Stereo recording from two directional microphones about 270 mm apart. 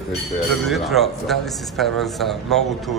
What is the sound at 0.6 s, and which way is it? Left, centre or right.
A man's voice, centre.